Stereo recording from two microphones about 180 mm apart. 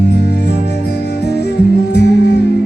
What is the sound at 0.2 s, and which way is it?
Music, 65° left (ahead or behind).